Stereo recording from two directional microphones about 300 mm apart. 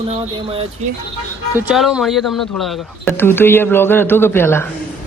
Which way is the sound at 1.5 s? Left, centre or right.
Centre.